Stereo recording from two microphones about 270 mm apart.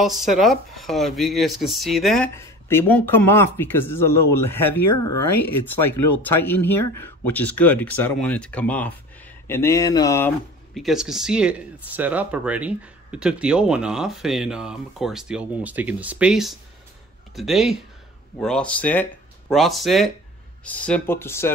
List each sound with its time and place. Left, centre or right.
0.3 s speech: centre
4.7 s speech: left
6.2 s speech: centre